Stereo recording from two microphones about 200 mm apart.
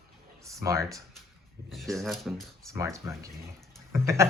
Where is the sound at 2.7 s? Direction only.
15° right (ahead or behind).